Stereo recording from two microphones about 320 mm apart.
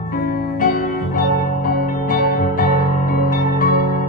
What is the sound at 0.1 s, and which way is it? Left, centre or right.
Music, left.